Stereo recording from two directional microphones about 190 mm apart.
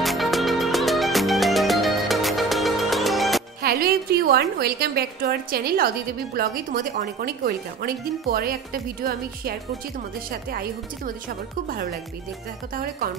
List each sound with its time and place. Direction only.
0.0 s music: centre (ahead or behind)
3.6 s a woman's voice: 55° right (ahead or behind)